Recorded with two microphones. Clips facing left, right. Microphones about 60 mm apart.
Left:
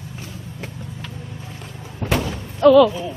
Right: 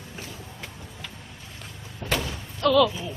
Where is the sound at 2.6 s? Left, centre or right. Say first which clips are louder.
Left 10 dB; left.